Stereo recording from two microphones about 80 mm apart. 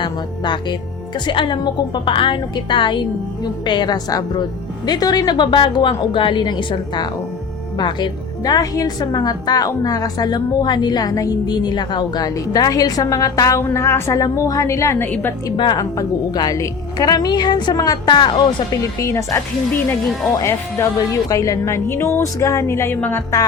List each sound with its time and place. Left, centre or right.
0.0 s a woman's voice: left
3.4 s a woman's voice: left
13.6 s a woman's voice: left
15.0 s a woman's voice: left
15.5 s speech: left
15.8 s a woman's voice: left
18.9 s a woman's voice: left
20.4 s a woman's voice: left